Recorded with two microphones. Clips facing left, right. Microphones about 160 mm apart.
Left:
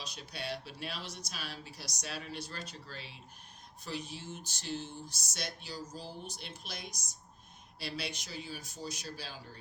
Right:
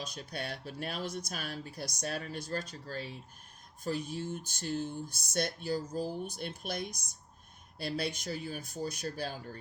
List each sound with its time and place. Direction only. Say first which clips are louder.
0.0 s speech: right 3 dB; 50° right (ahead or behind)